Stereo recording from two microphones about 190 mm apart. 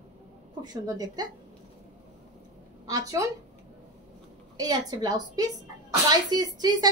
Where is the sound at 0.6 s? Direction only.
20° right (ahead or behind).